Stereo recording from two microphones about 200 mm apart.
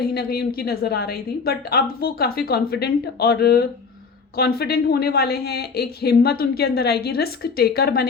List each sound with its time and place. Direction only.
0.0 s a woman's voice: 50° left (ahead or behind)